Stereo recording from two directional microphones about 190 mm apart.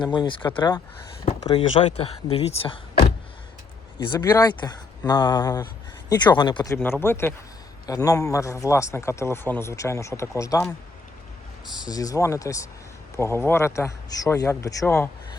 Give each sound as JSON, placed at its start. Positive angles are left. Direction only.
{"t": 0.0, "sound": "speech", "side_deg": 25}
{"t": 4.0, "sound": "a man's voice", "side_deg": 20}
{"t": 11.8, "sound": "a man's voice", "side_deg": 20}